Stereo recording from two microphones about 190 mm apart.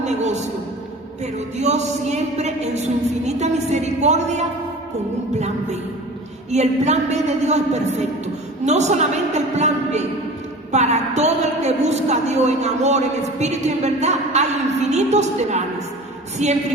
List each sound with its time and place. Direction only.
0.0 s a man's voice: 35° right (ahead or behind)
6.5 s a woman's voice: 35° right (ahead or behind)